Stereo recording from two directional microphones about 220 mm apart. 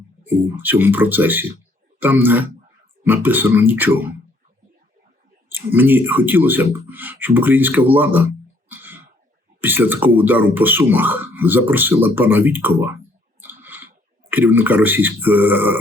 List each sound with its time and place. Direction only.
0.3 s speech: 10° right (ahead or behind)
5.5 s speech: 10° right (ahead or behind)
8.7 s cough: 10° right (ahead or behind)
9.6 s speech: 10° right (ahead or behind)
13.4 s a sound: 10° right (ahead or behind)
14.3 s speech: 10° right (ahead or behind)